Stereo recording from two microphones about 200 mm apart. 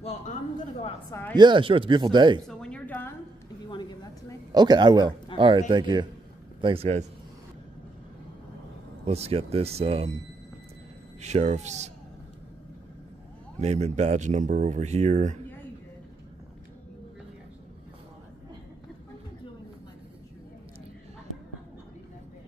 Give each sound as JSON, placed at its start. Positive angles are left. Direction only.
{"t": 0.0, "sound": "a man's voice", "side_deg": 35}
{"t": 1.3, "sound": "speech", "side_deg": -20}
{"t": 2.4, "sound": "a sound", "side_deg": 5}
{"t": 4.5, "sound": "speech", "side_deg": -20}
{"t": 9.0, "sound": "speech", "side_deg": -30}
{"t": 11.1, "sound": "speech", "side_deg": -35}
{"t": 13.6, "sound": "speech", "side_deg": -35}